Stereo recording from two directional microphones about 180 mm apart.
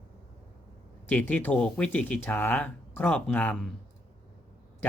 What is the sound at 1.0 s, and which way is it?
Speech, 10° left (ahead or behind).